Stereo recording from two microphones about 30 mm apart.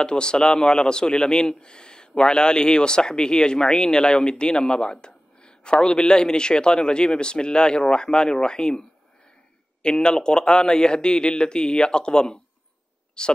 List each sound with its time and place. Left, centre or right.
0.0 s a man's voice: left
9.8 s a man's voice: left